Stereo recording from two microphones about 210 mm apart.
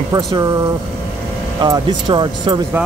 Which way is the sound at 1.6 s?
20° right (ahead or behind).